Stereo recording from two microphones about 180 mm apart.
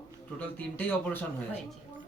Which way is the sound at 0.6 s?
10° left (ahead or behind).